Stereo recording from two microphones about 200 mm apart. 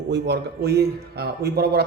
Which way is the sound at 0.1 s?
55° right (ahead or behind).